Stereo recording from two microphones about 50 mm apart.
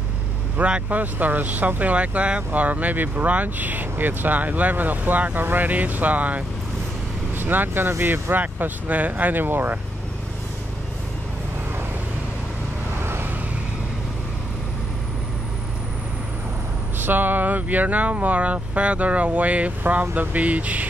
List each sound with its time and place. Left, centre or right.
0.6 s speech: right
0.9 s speech: right
13.0 s vehicle: right
17.0 s speech: right